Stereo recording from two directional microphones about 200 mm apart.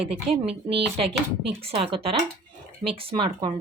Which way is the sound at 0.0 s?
30° right (ahead or behind).